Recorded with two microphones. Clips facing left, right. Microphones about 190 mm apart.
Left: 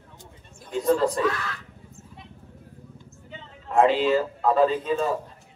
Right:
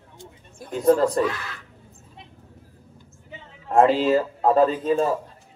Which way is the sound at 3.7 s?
40° right (ahead or behind).